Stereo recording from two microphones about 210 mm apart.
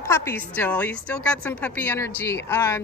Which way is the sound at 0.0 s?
10° left (ahead or behind).